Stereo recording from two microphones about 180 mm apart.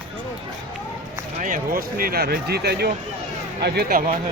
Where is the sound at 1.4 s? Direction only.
50° right (ahead or behind).